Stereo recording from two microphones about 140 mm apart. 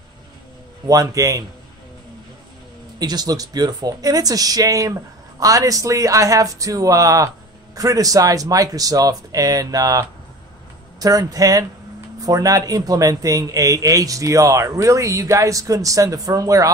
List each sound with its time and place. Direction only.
0.8 s a man's voice: 25° right (ahead or behind)
3.0 s a man's voice: 30° right (ahead or behind)